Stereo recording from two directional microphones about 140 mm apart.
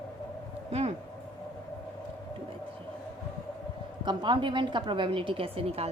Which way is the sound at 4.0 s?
35° right (ahead or behind).